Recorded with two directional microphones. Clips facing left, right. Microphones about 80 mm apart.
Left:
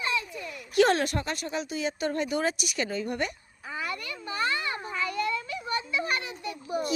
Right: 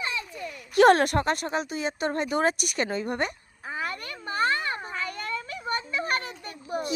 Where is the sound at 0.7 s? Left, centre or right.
Right.